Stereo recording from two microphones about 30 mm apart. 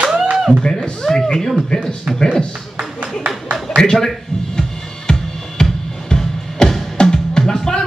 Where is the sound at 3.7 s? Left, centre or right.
Left.